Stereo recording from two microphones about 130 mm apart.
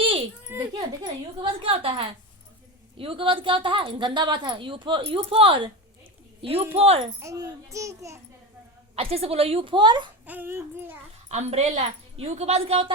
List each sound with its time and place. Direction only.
0.5 s a sound: 15° right (ahead or behind)
1.4 s a woman's voice: 45° right (ahead or behind)
7.2 s a child's voice: 25° right (ahead or behind)
9.0 s a woman's voice: 50° right (ahead or behind)
10.2 s a sound: 15° right (ahead or behind)
11.3 s a woman's voice: 55° right (ahead or behind)